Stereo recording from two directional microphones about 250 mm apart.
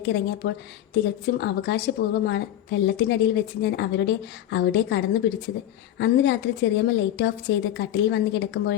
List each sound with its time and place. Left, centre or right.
0.0 s a woman's voice: left